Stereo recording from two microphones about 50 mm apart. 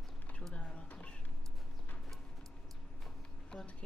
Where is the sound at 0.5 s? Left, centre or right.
Left.